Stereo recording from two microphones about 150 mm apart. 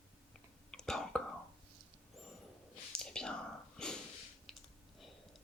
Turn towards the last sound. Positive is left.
turn(degrees=0)  # may be behind; listen again after turning